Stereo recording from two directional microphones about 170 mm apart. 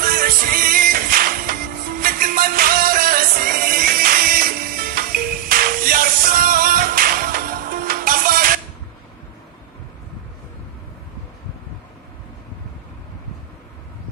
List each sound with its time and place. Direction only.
0.0 s music: 55° right (ahead or behind)